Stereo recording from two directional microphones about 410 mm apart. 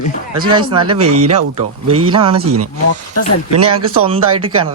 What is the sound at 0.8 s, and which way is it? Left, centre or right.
Speech, right.